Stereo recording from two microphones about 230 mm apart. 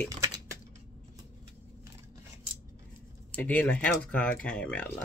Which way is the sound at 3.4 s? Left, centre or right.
Centre.